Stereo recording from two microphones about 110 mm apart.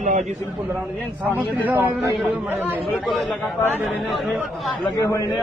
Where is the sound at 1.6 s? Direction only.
15° right (ahead or behind).